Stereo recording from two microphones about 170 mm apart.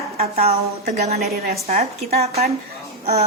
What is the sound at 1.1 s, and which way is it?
Speech, 65° right (ahead or behind).